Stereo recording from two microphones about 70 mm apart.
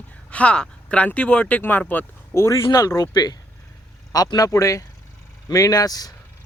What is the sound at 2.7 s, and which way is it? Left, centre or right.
Speech, left.